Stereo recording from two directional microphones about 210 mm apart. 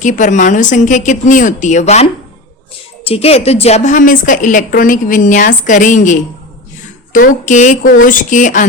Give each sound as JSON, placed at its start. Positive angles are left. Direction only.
{"t": 0.0, "sound": "a woman's voice", "side_deg": 35}